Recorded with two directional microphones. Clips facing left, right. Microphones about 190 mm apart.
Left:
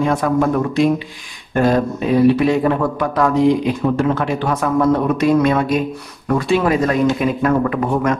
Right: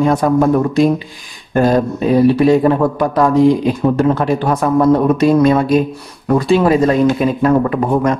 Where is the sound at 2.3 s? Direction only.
35° right (ahead or behind).